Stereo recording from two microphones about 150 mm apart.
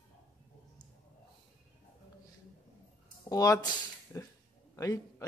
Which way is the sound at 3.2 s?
25° left (ahead or behind).